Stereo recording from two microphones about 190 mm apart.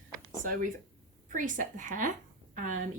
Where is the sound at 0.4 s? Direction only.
45° right (ahead or behind).